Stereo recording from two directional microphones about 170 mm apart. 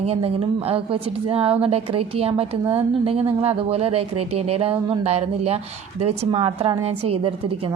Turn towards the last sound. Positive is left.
turn(degrees=-35)  # may be behind; listen again after turning